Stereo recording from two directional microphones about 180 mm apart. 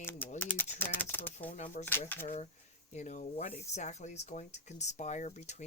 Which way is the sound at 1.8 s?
10° left (ahead or behind).